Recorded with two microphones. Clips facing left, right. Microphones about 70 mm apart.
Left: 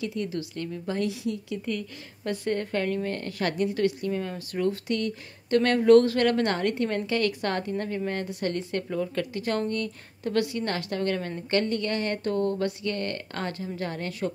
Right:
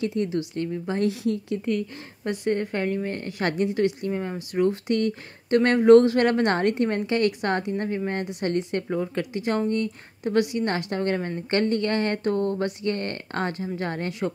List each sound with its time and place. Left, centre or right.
0.0 s speech: right
1.0 s speech: right
1.7 s speech: right
11.6 s speech: right